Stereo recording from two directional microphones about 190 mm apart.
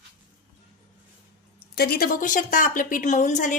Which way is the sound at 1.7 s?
55° left (ahead or behind).